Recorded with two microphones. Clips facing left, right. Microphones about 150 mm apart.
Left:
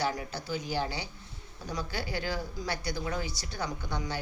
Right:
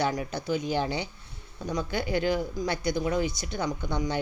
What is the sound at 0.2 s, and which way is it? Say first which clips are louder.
A woman's voice: right 6 dB; 20° right (ahead or behind).